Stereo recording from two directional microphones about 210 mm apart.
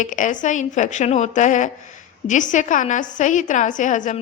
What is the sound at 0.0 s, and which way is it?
A woman's voice, 40° left (ahead or behind).